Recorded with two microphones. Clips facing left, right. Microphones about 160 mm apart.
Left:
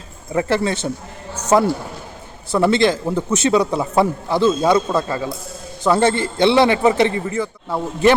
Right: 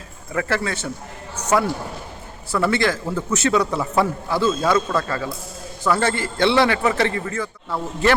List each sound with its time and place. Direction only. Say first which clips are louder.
0.3 s a man's voice: left 5 dB; 20° left (ahead or behind)